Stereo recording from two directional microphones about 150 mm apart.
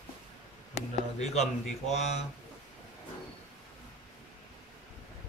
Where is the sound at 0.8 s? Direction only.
50° left (ahead or behind).